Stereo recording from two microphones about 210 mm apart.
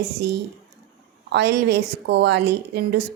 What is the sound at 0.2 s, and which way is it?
Speech, 55° right (ahead or behind).